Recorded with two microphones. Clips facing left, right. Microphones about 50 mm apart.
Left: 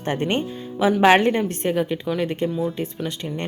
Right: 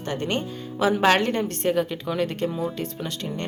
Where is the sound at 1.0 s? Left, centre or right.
Left; by 3.3 s centre.